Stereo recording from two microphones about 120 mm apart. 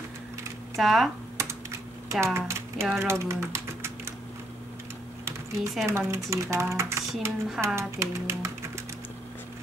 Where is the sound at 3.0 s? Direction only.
25° right (ahead or behind).